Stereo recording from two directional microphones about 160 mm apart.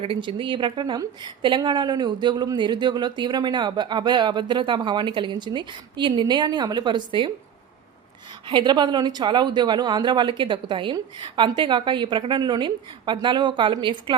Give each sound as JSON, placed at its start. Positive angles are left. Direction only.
{"t": 0.0, "sound": "a woman's voice", "side_deg": -35}
{"t": 8.4, "sound": "a woman's voice", "side_deg": -30}